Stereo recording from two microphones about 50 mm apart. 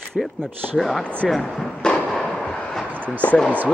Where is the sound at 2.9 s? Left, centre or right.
Left.